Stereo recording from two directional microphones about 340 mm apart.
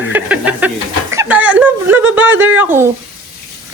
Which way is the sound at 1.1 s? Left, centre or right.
Centre.